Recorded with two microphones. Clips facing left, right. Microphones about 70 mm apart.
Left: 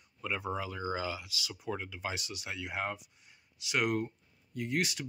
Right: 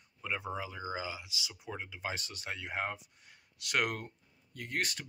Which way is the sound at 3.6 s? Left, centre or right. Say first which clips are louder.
Left 2 dB; right.